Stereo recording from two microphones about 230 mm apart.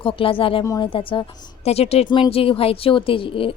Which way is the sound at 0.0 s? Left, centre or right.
Left.